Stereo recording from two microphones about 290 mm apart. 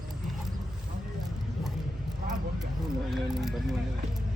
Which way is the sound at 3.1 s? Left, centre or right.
Centre.